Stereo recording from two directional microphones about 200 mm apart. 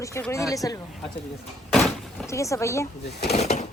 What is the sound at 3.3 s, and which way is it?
Speech, 35° left (ahead or behind).